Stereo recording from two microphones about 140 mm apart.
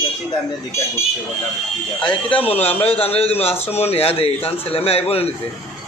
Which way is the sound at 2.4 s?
45° left (ahead or behind).